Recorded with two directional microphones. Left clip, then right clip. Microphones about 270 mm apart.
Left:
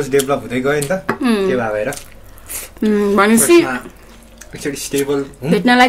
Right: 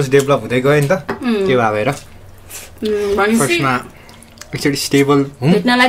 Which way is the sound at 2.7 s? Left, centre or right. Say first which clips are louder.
Left 2 dB; left.